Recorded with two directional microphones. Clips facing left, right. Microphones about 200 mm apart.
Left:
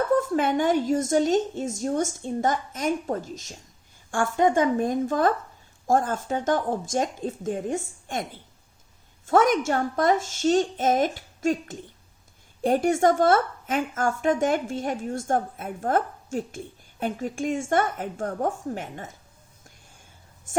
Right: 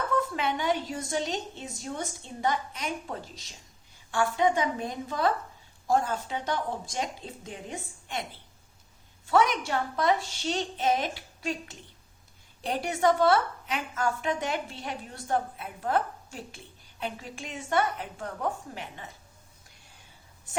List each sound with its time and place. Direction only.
0.1 s a woman's voice: 50° left (ahead or behind)